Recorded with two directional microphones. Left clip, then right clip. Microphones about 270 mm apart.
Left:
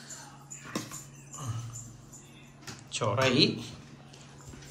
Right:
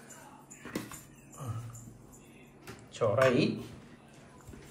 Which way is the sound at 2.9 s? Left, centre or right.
Centre.